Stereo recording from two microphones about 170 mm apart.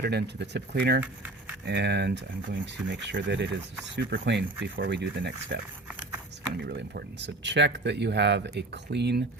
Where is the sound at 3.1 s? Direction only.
90° right.